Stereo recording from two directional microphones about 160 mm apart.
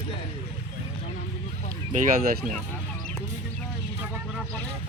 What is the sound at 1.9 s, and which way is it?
Speech, 55° right (ahead or behind).